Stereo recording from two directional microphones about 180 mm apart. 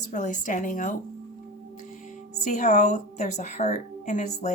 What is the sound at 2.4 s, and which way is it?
A woman's voice, 40° left (ahead or behind).